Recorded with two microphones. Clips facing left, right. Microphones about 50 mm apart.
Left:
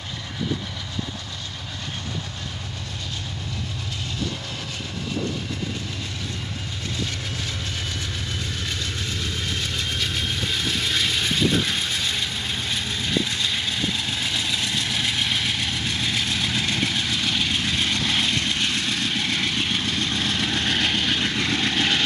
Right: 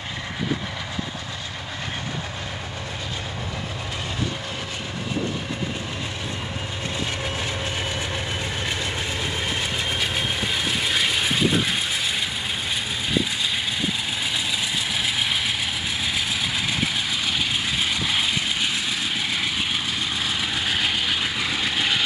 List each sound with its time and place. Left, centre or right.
9.2 s vehicle: right
14.2 s vehicle: centre